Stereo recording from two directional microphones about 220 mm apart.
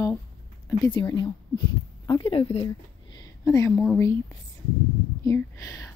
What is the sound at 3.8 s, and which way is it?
Speech, 10° left (ahead or behind).